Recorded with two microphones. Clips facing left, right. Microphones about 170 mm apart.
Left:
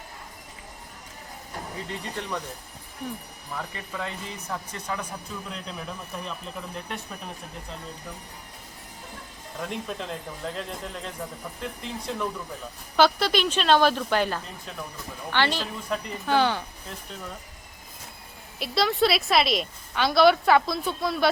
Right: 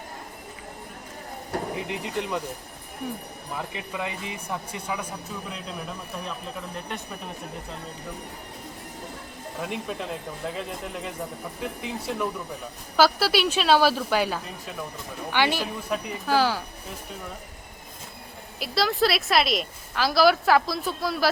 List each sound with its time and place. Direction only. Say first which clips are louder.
1.5 s a sound: right 8 dB; 70° right (ahead or behind)
1.9 s speech: right 1 dB; 15° right (ahead or behind)
3.5 s a woman's voice: right 2 dB; 15° right (ahead or behind)
9.6 s a woman's voice: right 1 dB; 5° right (ahead or behind)
18.6 s a woman's voice: even; centre (ahead or behind)